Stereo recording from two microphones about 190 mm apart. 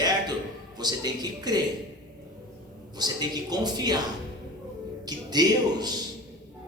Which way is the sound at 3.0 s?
20° right (ahead or behind).